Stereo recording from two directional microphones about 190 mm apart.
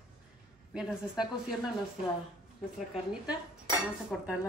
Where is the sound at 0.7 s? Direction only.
5° right (ahead or behind).